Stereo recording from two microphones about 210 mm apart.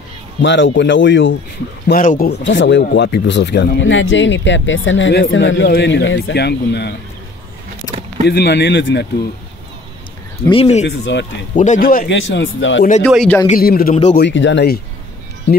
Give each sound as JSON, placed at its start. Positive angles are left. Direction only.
{"t": 0.4, "sound": "speech", "side_deg": 60}
{"t": 1.9, "sound": "speech", "side_deg": 40}
{"t": 8.3, "sound": "speech", "side_deg": 50}
{"t": 10.5, "sound": "speech", "side_deg": 30}
{"t": 10.9, "sound": "speech", "side_deg": 55}
{"t": 11.5, "sound": "speech", "side_deg": 35}
{"t": 12.2, "sound": "speech", "side_deg": 60}
{"t": 13.1, "sound": "a man's voice", "side_deg": 0}
{"t": 13.5, "sound": "speech", "side_deg": 45}
{"t": 14.1, "sound": "speech", "side_deg": 55}